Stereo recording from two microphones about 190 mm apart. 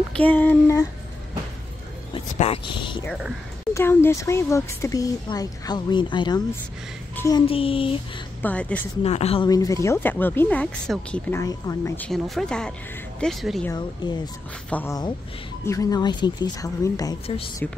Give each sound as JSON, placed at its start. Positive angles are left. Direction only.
{"t": 0.1, "sound": "speech", "side_deg": 10}
{"t": 2.1, "sound": "speech", "side_deg": 30}
{"t": 3.7, "sound": "speech", "side_deg": 10}
{"t": 7.4, "sound": "speech", "side_deg": 30}
{"t": 8.4, "sound": "speech", "side_deg": 5}
{"t": 9.0, "sound": "speech", "side_deg": 35}
{"t": 9.5, "sound": "speech", "side_deg": 15}
{"t": 12.1, "sound": "speech", "side_deg": 5}
{"t": 13.7, "sound": "speech", "side_deg": 20}
{"t": 14.7, "sound": "speech", "side_deg": 10}